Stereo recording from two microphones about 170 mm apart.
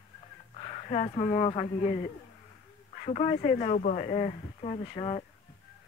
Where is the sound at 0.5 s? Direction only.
40° left (ahead or behind).